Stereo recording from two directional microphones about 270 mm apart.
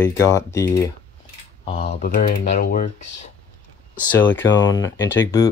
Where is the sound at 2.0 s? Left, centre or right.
Left.